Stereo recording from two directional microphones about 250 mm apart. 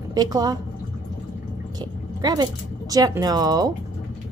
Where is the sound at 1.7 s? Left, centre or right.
Centre.